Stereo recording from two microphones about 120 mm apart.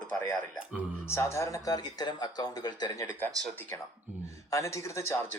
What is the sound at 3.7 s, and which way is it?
A man's voice, 20° left (ahead or behind).